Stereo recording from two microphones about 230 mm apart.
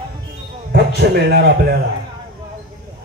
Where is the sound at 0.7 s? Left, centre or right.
Right.